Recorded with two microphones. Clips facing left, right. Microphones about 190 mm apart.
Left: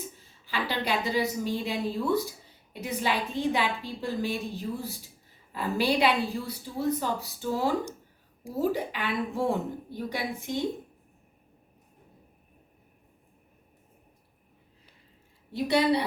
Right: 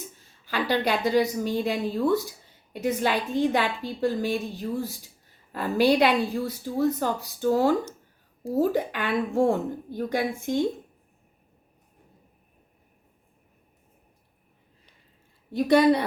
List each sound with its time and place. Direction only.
0.4 s a woman's voice: 45° right (ahead or behind)
15.5 s a woman's voice: 50° right (ahead or behind)